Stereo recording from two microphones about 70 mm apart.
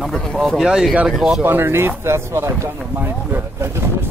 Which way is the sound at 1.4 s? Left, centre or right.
Right.